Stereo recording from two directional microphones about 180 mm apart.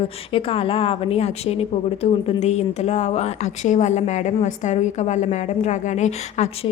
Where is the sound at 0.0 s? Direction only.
30° left (ahead or behind).